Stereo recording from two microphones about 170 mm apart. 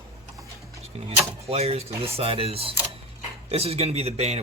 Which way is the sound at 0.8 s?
35° right (ahead or behind).